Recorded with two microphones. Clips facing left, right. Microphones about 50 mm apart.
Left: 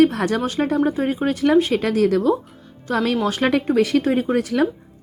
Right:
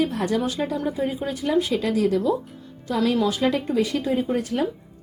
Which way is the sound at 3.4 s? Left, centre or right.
Left.